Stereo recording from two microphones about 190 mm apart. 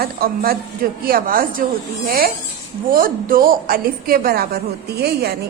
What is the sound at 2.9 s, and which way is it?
A woman's voice, 50° right (ahead or behind).